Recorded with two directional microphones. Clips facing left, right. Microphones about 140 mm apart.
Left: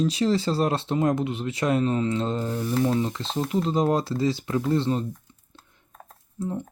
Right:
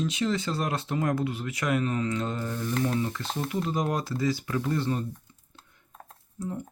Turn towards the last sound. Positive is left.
turn(degrees=25)  # may be behind; listen again after turning